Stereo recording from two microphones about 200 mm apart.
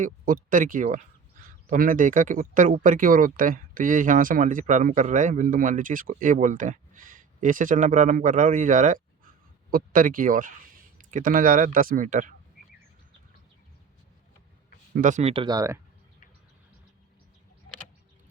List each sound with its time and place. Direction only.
0.0 s speech: 40° right (ahead or behind)
14.9 s speech: 40° right (ahead or behind); by 15.8 s 15° right (ahead or behind)